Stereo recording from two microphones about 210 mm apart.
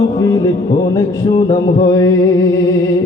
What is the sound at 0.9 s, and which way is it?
Mantra, 20° left (ahead or behind).